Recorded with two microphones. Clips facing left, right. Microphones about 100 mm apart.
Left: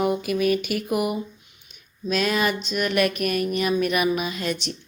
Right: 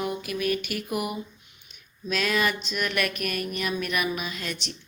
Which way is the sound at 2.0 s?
30° left (ahead or behind).